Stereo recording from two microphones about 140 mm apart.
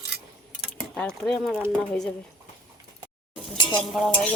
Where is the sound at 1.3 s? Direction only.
5° left (ahead or behind).